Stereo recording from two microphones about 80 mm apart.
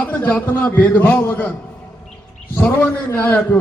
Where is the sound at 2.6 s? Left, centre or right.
Centre.